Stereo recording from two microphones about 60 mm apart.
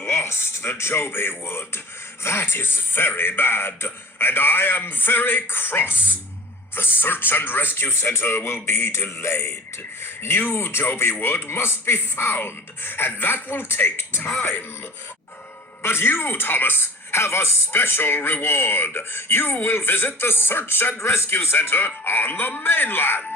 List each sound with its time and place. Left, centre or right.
0.0 s a man's voice: left
15.8 s a man's voice: left